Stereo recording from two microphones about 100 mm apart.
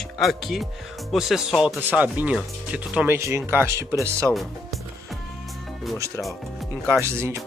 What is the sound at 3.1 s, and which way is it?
Speech, 25° right (ahead or behind).